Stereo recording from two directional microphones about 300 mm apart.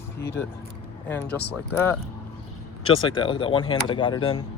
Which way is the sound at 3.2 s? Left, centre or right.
Centre.